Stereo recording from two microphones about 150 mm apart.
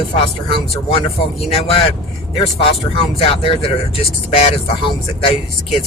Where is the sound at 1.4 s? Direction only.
40° left (ahead or behind).